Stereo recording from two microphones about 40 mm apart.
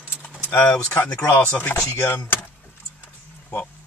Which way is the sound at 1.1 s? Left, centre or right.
Left.